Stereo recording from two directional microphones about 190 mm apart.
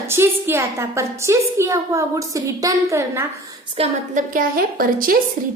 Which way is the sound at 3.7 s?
35° right (ahead or behind).